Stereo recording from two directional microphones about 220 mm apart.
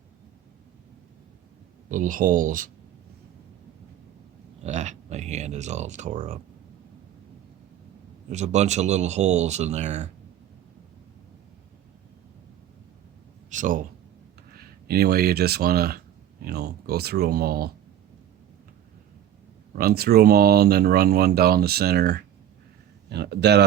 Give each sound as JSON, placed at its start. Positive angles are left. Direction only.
{"t": 1.9, "sound": "a man's voice", "side_deg": -35}
{"t": 4.6, "sound": "a sound", "side_deg": -30}
{"t": 8.3, "sound": "a man's voice", "side_deg": -30}
{"t": 13.5, "sound": "speech", "side_deg": -35}
{"t": 14.8, "sound": "speech", "side_deg": -45}
{"t": 19.7, "sound": "speech", "side_deg": -45}